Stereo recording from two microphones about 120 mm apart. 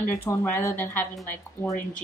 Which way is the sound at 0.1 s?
25° left (ahead or behind).